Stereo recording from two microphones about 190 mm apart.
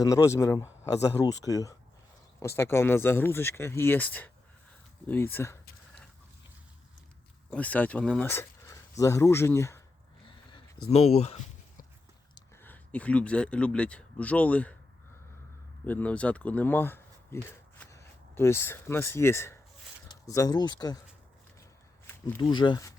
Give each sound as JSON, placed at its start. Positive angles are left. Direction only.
{"t": 0.0, "sound": "speech", "side_deg": 15}
{"t": 7.5, "sound": "speech", "side_deg": 10}
{"t": 10.5, "sound": "speech", "side_deg": 30}
{"t": 12.6, "sound": "speech", "side_deg": 10}
{"t": 15.9, "sound": "speech", "side_deg": 10}
{"t": 22.4, "sound": "speech", "side_deg": 25}